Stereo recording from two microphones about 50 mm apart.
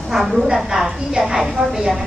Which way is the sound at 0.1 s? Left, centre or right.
Centre.